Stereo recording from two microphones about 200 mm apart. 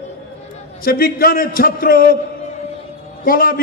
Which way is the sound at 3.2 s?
45° left (ahead or behind).